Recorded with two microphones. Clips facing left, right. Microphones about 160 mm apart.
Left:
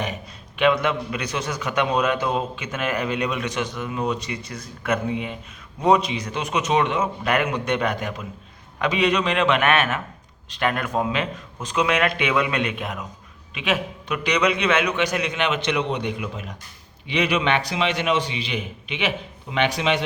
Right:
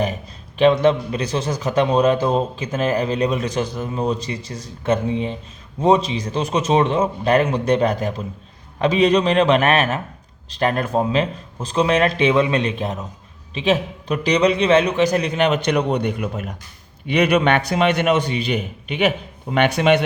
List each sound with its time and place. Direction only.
0.6 s a man's voice: 35° right (ahead or behind); by 20.0 s 55° right (ahead or behind)